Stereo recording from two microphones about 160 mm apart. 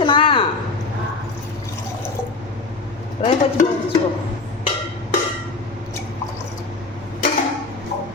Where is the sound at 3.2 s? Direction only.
40° left (ahead or behind).